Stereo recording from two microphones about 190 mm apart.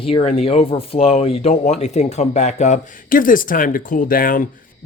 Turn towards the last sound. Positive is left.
turn(degrees=45)  # may be behind; listen again after turning